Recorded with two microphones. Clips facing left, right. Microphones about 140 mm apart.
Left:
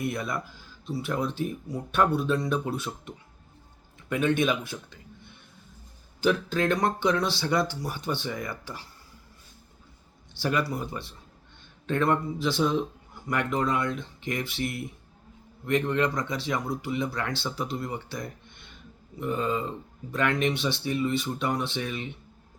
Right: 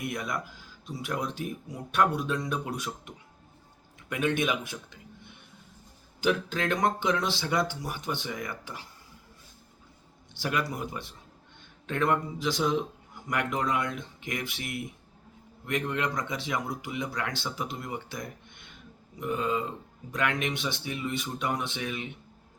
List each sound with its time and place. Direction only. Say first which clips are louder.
0.0 s speech: left 3 dB; 15° right (ahead or behind)
6.1 s speech: left 3 dB; 15° right (ahead or behind)
10.3 s speech: left 3 dB; 15° right (ahead or behind)